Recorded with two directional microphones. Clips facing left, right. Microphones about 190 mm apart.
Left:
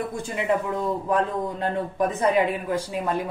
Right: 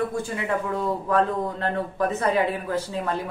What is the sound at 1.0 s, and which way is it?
A woman's voice, 15° left (ahead or behind).